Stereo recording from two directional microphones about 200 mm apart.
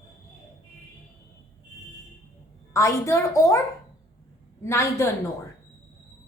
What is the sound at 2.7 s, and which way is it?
Speech, 15° left (ahead or behind).